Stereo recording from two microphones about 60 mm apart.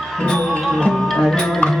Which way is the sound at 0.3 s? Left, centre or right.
Centre.